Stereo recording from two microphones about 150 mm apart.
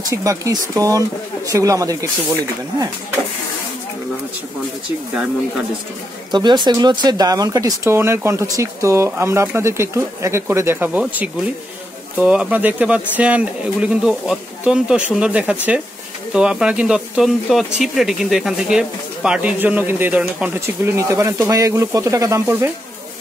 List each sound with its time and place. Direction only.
0.1 s speech: 20° right (ahead or behind)
6.3 s speech: 30° right (ahead or behind)